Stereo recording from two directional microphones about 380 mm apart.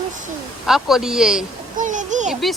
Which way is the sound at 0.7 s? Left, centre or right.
Centre.